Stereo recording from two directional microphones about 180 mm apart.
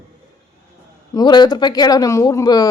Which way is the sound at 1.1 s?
25° left (ahead or behind).